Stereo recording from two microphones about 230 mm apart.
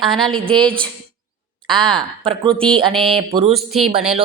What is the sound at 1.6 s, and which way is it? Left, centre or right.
A woman's voice, right.